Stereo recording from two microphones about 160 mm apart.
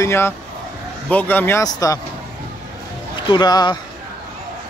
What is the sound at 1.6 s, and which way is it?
Speech, 20° left (ahead or behind).